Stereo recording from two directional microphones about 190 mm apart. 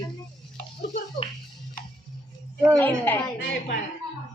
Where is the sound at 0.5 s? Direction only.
40° left (ahead or behind).